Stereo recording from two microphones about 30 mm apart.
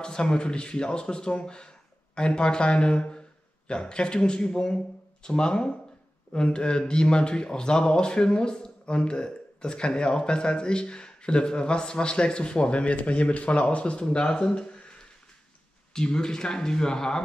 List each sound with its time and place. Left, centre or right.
0.0 s a man's voice: left
14.6 s a sound: left
15.9 s a man's voice: left